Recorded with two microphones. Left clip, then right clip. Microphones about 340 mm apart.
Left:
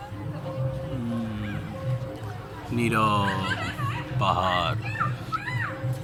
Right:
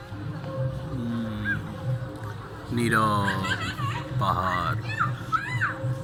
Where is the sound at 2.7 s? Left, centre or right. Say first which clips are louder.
Even; centre.